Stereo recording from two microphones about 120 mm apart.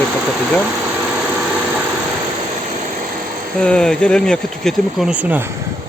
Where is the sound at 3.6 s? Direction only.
5° left (ahead or behind); by 5.5 s 15° right (ahead or behind).